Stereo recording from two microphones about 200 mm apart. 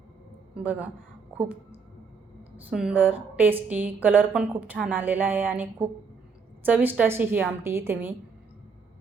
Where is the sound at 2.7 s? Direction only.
5° right (ahead or behind).